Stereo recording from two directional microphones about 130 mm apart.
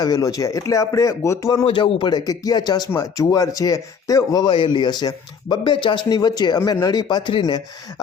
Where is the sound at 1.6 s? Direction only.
45° left (ahead or behind).